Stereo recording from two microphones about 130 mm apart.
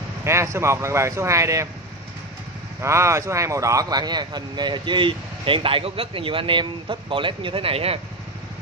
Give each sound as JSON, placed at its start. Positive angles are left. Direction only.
{"t": 0.2, "sound": "speech", "side_deg": -20}
{"t": 2.8, "sound": "speech", "side_deg": -20}